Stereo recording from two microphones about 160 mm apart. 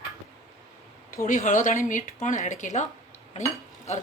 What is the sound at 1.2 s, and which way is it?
A woman's voice, 55° left (ahead or behind).